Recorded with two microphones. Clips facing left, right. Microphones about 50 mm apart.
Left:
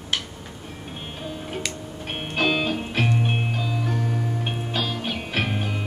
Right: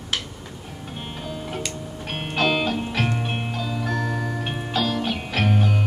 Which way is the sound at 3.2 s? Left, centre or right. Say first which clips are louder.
Left 1 dB; centre.